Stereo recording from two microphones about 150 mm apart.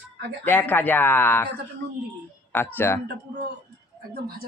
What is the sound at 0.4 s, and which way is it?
Speech, 15° left (ahead or behind).